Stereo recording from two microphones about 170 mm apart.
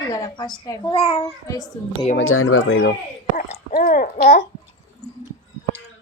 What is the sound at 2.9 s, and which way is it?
A child's voice, 55° left (ahead or behind).